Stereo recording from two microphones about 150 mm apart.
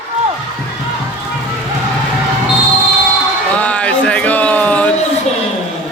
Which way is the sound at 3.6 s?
10° left (ahead or behind).